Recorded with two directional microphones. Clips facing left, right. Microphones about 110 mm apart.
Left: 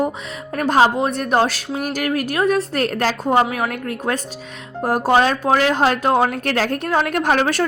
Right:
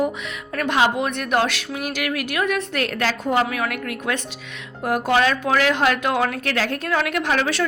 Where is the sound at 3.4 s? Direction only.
30° left (ahead or behind).